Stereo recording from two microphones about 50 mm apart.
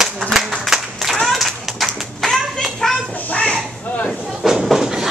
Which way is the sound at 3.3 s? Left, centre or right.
Left.